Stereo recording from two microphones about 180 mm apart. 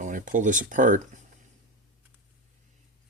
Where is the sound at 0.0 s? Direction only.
45° right (ahead or behind).